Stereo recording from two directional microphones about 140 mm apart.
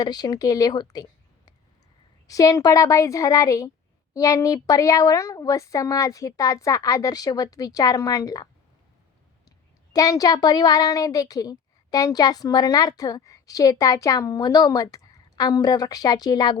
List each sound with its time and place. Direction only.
0.0 s a woman's voice: 30° left (ahead or behind)
2.2 s a woman's voice: 25° left (ahead or behind)
9.9 s a woman's voice: 25° left (ahead or behind)